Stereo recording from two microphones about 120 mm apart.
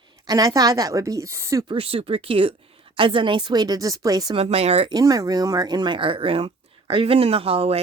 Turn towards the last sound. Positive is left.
turn(degrees=-55)  # may be behind; listen again after turning